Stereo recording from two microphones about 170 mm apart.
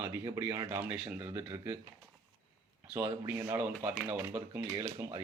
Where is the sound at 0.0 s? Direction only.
15° right (ahead or behind).